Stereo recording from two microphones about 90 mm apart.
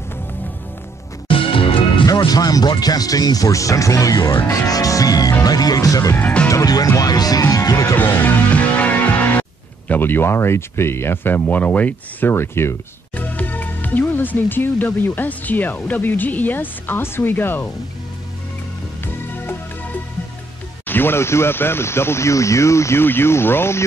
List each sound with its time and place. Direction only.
1.3 s music: 80° left
2.2 s speech: 45° left (ahead or behind)
6.1 s speech: 20° left (ahead or behind)
6.5 s speech: 45° left (ahead or behind)
7.9 s music: 25° left (ahead or behind)
13.1 s speech: 20° left (ahead or behind)
19.3 s music: 20° left (ahead or behind)
20.8 s speech: 25° left (ahead or behind)